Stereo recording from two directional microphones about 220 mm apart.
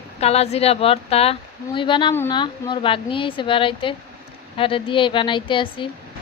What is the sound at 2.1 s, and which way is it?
Speech, 10° left (ahead or behind).